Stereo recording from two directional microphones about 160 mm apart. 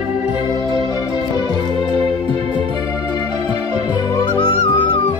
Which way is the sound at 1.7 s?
35° right (ahead or behind).